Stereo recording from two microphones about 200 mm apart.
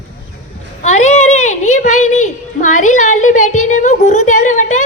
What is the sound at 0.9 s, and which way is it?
A woman's voice, 35° left (ahead or behind).